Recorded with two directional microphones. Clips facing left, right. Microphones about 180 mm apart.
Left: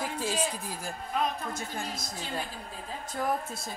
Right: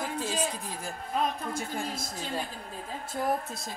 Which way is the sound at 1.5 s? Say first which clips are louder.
Right 2 dB; 30° right (ahead or behind).